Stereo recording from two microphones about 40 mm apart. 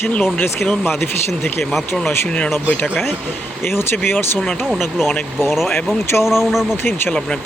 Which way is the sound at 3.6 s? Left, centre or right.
Left.